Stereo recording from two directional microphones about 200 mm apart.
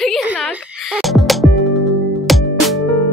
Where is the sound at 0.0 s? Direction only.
Centre (ahead or behind).